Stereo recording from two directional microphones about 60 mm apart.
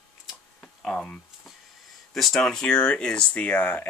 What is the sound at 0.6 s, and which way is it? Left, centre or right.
Tick-tock, centre.